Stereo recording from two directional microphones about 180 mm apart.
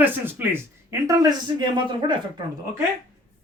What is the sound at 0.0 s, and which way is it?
A man's voice, 10° right (ahead or behind).